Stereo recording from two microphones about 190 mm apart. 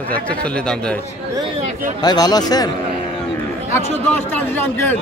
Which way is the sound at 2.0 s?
20° left (ahead or behind).